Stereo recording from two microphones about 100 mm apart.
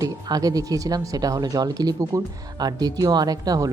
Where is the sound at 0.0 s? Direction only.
40° right (ahead or behind).